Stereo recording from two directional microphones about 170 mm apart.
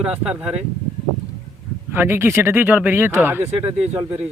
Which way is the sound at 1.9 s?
10° right (ahead or behind).